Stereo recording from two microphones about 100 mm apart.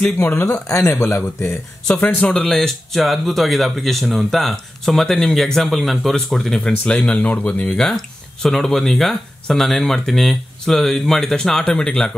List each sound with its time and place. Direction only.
0.2 s speech: 25° left (ahead or behind)
2.1 s speech: 5° left (ahead or behind)